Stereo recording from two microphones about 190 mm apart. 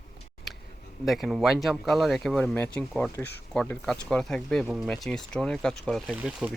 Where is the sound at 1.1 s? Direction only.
Centre (ahead or behind).